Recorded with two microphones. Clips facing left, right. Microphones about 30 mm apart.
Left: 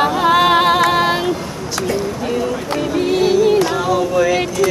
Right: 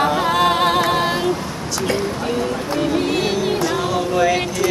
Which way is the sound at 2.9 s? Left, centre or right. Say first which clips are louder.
Left 9 dB; centre.